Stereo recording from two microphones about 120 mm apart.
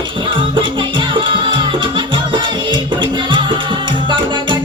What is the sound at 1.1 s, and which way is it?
Music, 45° right (ahead or behind).